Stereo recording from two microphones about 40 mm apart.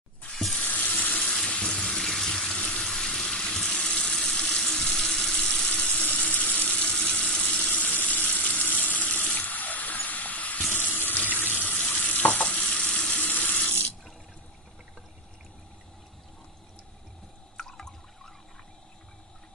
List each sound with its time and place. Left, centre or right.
0.6 s frying: left
1.4 s water tap: left
1.8 s water tap: centre
2.8 s water: centre
4.6 s water tap: centre
5.6 s sizzle: left
6.3 s water tap: left
7.1 s water tap: left
7.4 s water: left
10.7 s water tap: left
11.8 s stir: left
13.1 s sizzle: left
17.6 s water: centre